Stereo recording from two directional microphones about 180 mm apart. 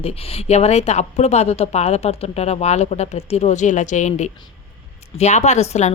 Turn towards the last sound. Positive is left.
turn(degrees=40)  # may be behind; listen again after turning